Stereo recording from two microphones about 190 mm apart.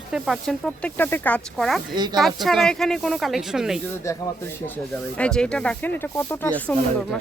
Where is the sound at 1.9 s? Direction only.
20° right (ahead or behind).